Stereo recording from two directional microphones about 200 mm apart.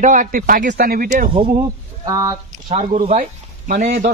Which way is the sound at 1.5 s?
20° right (ahead or behind).